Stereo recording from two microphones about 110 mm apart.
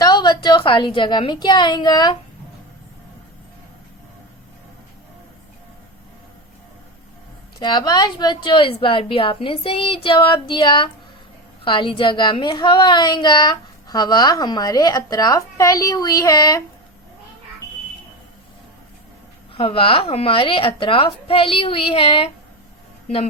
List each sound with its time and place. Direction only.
0.0 s a child's voice: 40° left (ahead or behind)
7.6 s a woman's voice: 40° left (ahead or behind)
19.5 s a woman's voice: 55° left (ahead or behind)